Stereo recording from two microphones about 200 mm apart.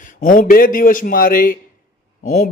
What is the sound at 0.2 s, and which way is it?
Speech, 45° left (ahead or behind).